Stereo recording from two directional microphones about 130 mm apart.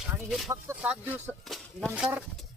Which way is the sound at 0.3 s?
Centre (ahead or behind).